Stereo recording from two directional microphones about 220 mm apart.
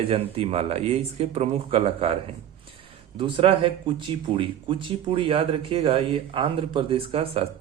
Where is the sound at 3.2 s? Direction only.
25° right (ahead or behind).